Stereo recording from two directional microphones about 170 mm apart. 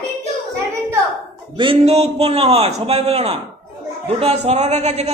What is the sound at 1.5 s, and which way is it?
A man's voice, 30° right (ahead or behind).